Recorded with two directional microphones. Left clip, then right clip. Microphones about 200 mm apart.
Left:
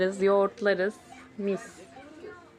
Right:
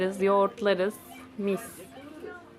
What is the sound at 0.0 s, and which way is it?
Speech, 15° left (ahead or behind).